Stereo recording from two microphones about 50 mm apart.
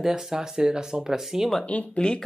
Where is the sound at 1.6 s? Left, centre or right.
Left.